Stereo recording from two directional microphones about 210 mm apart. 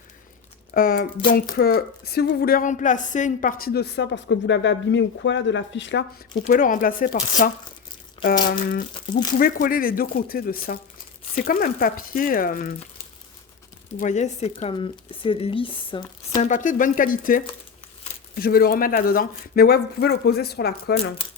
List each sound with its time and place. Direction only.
0.7 s speech: 45° left (ahead or behind)
6.4 s speech: 40° left (ahead or behind)
14.0 s speech: 35° left (ahead or behind)